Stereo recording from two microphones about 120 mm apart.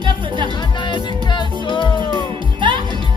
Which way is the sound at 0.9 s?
40° left (ahead or behind).